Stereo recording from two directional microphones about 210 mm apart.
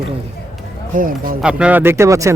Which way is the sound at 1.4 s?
5° right (ahead or behind).